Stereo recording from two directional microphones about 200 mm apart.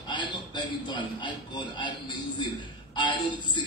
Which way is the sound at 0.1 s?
20° left (ahead or behind).